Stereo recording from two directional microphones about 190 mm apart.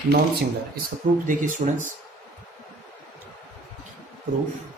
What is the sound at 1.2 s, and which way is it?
Speech, 45° right (ahead or behind).